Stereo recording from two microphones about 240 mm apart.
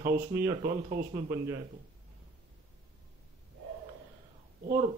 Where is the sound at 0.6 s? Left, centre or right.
Right.